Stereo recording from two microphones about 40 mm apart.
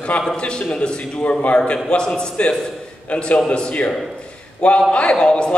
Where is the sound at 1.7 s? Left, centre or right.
Left.